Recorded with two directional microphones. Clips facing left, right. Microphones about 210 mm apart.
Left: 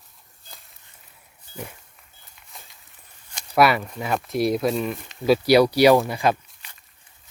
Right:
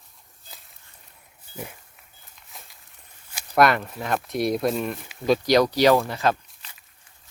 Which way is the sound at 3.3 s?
Centre (ahead or behind).